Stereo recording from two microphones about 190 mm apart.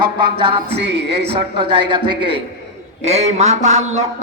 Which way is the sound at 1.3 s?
25° right (ahead or behind).